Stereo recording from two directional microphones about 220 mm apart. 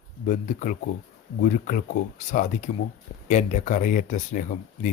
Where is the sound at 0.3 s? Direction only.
35° left (ahead or behind).